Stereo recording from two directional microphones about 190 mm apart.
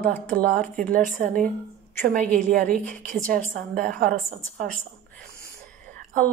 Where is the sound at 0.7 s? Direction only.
45° right (ahead or behind).